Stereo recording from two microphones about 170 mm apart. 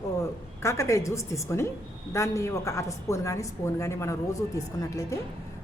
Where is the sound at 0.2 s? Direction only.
15° left (ahead or behind).